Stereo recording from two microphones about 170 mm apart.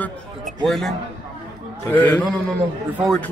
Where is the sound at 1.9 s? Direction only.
10° left (ahead or behind).